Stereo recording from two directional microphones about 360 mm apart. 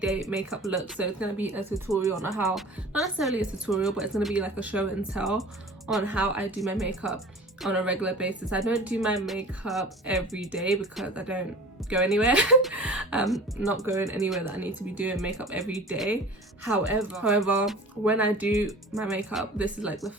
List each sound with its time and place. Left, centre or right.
0.0 s speech: centre